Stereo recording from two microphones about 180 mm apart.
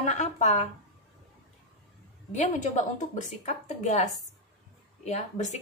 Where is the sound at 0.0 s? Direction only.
40° left (ahead or behind).